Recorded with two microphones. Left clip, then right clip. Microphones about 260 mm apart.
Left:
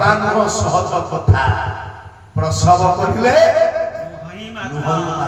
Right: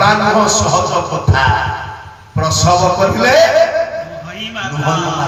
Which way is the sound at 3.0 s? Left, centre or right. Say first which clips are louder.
Right 3 dB; right.